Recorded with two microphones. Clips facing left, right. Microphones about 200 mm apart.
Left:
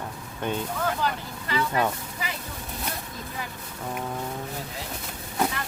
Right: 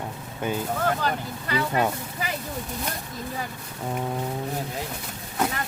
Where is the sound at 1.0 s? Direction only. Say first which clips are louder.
Right 1 dB; 45° right (ahead or behind).